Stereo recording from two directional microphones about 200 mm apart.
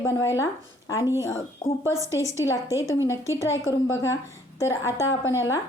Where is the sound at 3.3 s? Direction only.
15° left (ahead or behind).